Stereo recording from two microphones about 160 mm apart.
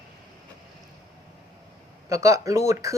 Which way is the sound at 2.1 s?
20° right (ahead or behind).